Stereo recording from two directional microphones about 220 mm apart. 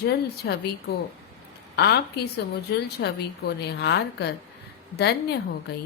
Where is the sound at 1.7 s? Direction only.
50° left (ahead or behind).